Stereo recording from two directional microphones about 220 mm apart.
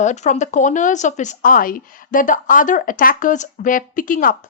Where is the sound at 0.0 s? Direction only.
35° left (ahead or behind).